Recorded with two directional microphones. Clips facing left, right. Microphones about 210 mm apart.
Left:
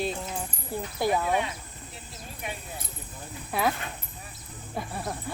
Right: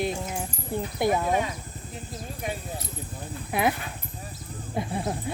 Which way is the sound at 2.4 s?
40° right (ahead or behind).